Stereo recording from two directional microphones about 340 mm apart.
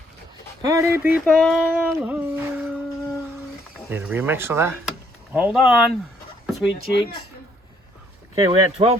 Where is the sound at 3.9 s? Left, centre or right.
Centre.